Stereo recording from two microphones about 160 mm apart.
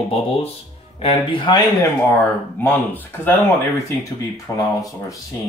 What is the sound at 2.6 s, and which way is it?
Speech, 10° left (ahead or behind).